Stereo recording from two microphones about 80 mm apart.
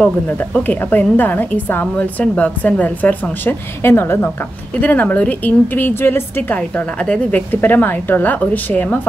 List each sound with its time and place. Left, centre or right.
0.4 s a woman's voice: left
7.0 s a woman's voice: centre